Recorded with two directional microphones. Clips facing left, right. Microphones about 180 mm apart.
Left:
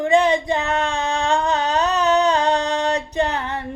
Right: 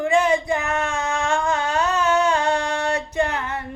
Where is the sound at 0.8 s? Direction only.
35° left (ahead or behind).